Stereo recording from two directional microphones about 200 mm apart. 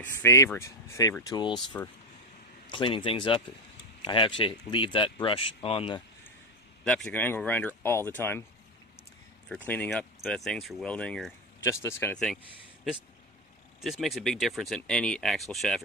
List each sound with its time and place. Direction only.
0.0 s speech: 15° left (ahead or behind)
6.8 s speech: 5° left (ahead or behind)
9.7 s speech: 5° left (ahead or behind)
13.7 s speech: centre (ahead or behind)